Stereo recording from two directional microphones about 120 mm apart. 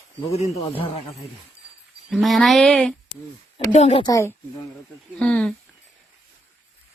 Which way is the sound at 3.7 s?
60° left (ahead or behind).